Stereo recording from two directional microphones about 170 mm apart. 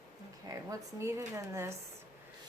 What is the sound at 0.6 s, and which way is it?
Speech, 15° right (ahead or behind).